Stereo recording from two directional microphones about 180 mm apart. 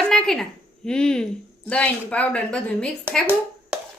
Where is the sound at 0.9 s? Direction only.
5° left (ahead or behind).